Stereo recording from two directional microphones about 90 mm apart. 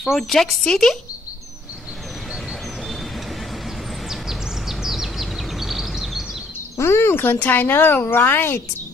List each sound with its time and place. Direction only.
0.0 s speech: centre (ahead or behind)
4.1 s a sound: 5° right (ahead or behind)
6.8 s speech: 30° left (ahead or behind)